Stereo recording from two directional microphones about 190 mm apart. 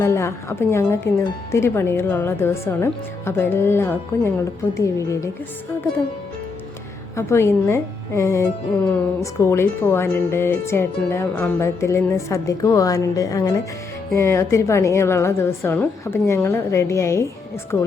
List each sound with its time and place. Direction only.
0.0 s speech: 15° left (ahead or behind)
7.2 s speech: 15° left (ahead or behind)